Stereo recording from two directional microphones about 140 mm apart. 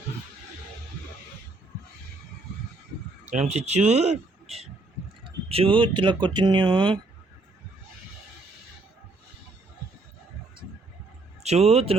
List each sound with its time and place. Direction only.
3.2 s speech: 55° right (ahead or behind); by 7.0 s 35° right (ahead or behind)
11.4 s speech: 50° right (ahead or behind)